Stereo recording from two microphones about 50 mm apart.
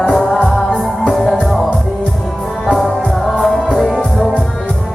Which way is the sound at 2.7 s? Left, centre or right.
Centre.